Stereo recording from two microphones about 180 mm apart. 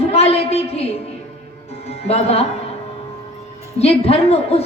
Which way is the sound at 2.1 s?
35° left (ahead or behind).